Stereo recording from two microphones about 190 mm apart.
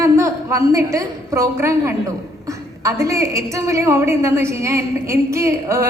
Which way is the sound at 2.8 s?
15° right (ahead or behind).